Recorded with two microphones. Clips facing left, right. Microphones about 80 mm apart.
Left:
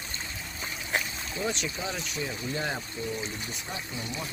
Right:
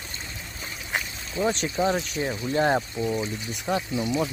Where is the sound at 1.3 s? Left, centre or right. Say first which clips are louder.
Right 7 dB; right.